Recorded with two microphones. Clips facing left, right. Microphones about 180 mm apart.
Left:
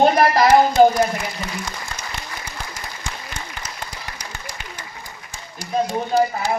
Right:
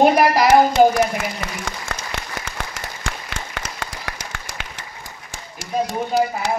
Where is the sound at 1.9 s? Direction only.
70° right (ahead or behind).